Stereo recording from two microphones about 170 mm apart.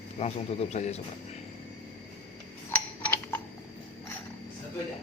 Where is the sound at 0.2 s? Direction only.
35° left (ahead or behind).